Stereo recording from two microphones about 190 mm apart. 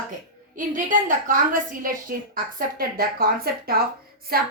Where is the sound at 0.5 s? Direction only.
45° right (ahead or behind).